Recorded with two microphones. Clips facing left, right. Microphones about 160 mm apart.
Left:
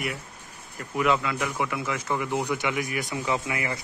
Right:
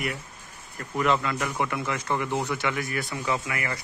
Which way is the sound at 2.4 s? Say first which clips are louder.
Left 1 dB; 15° left (ahead or behind).